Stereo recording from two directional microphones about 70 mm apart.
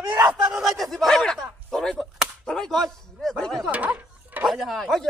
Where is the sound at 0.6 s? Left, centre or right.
Centre.